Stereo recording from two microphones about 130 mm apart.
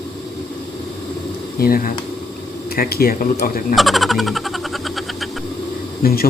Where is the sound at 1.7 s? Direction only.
90° left.